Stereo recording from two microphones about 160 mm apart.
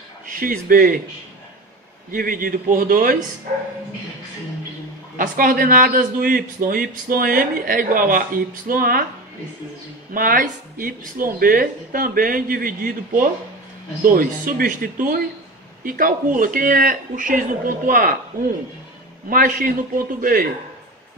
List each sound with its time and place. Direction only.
0.3 s a man's voice: 60° right (ahead or behind)
2.0 s a man's voice: 60° right (ahead or behind)
5.1 s a man's voice: 55° right (ahead or behind)
10.1 s a man's voice: 60° right (ahead or behind)